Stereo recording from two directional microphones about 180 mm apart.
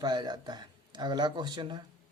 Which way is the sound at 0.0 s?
20° right (ahead or behind).